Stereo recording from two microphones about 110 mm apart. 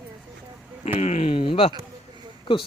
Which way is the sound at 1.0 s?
80° left.